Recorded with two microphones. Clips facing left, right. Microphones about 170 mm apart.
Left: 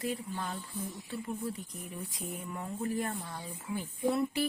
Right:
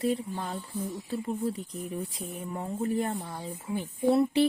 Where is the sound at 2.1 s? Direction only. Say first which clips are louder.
Right 4 dB; 30° right (ahead or behind).